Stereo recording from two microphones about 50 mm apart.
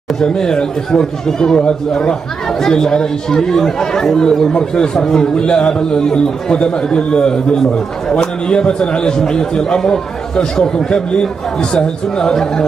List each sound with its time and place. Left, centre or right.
0.2 s speech: centre